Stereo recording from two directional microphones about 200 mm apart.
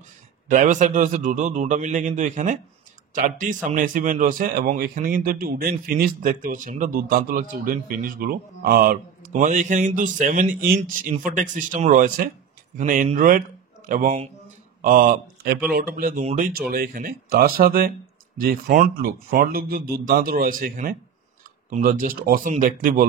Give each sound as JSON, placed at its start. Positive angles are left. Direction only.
{"t": 0.5, "sound": "a man's voice", "side_deg": -40}